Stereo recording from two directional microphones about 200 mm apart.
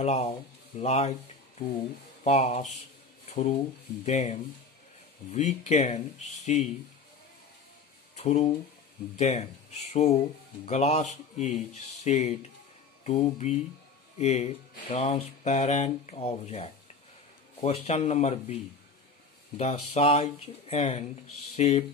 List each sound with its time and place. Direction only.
0.0 s speech: 30° left (ahead or behind)
2.2 s speech: 35° left (ahead or behind)
8.2 s speech: 35° left (ahead or behind)